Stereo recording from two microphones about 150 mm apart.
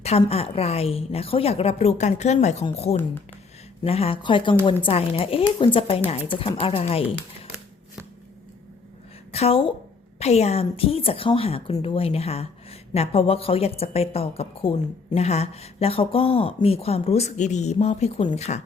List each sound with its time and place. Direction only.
0.0 s a woman's voice: 45° left (ahead or behind)
9.3 s a woman's voice: 40° left (ahead or behind)